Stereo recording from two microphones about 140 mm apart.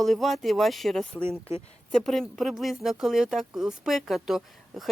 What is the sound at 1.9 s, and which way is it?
Speech, 5° left (ahead or behind).